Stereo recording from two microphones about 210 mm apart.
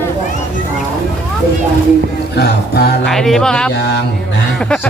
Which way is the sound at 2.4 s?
50° left (ahead or behind).